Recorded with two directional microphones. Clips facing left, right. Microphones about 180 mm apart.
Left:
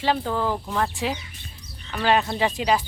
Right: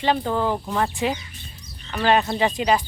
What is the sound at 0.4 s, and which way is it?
Speech, 15° right (ahead or behind).